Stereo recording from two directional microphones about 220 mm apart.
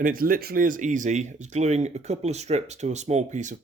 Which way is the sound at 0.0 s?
40° right (ahead or behind).